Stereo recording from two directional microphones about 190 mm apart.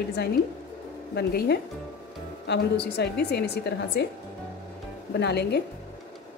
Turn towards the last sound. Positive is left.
turn(degrees=60)  # may be behind; listen again after turning